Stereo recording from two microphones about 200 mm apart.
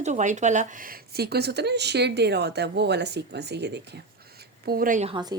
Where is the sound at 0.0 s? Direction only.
35° right (ahead or behind).